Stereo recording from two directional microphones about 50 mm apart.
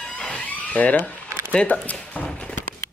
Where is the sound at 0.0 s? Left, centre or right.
Left.